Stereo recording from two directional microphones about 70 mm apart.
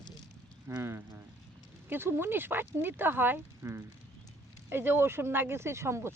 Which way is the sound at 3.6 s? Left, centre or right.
Right.